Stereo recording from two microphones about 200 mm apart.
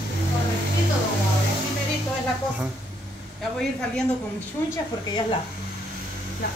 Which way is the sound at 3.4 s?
5° left (ahead or behind).